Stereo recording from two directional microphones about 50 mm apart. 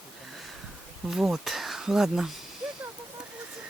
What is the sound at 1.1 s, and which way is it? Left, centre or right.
Speech, centre.